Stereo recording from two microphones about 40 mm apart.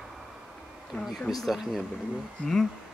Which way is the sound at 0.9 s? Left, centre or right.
Left.